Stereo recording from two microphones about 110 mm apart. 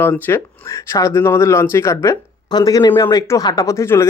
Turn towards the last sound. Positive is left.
turn(degrees=25)  # may be behind; listen again after turning